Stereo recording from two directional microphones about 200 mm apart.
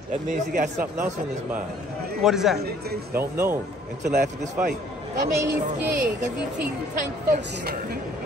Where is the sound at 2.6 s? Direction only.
55° right (ahead or behind).